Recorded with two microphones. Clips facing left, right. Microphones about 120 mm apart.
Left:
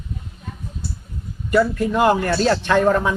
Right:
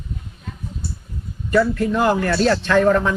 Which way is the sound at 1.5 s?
15° left (ahead or behind).